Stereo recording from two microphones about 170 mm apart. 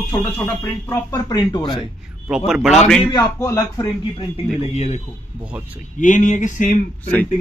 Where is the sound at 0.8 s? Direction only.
20° left (ahead or behind).